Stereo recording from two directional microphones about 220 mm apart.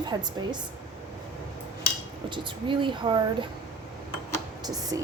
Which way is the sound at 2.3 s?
20° right (ahead or behind).